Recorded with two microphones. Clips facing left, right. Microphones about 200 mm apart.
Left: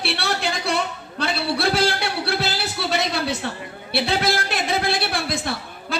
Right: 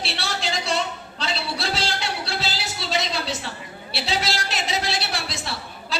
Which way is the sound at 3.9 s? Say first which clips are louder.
Left 5 dB; 55° left (ahead or behind).